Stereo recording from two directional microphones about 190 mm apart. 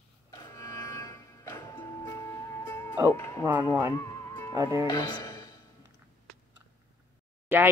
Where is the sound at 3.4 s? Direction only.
10° right (ahead or behind).